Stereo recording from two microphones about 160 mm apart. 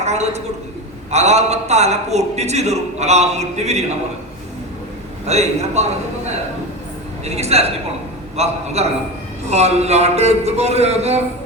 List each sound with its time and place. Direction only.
0.0 s a man's voice: 45° right (ahead or behind)
5.2 s a man's voice: 45° right (ahead or behind)
7.3 s a woman's voice: 40° right (ahead or behind)